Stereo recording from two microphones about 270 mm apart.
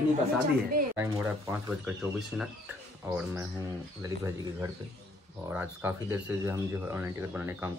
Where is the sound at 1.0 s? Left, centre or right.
Centre.